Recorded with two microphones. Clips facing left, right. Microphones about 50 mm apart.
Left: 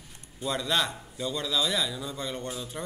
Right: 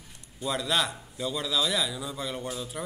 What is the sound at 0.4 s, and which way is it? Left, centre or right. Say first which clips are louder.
A man's voice: even; centre.